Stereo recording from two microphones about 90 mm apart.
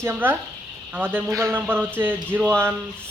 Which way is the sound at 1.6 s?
25° right (ahead or behind).